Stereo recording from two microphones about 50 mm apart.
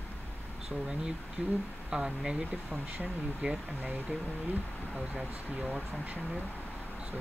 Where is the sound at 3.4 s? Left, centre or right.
Right.